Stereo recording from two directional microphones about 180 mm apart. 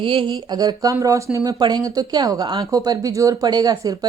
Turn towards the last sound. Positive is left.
turn(degrees=-20)  # may be behind; listen again after turning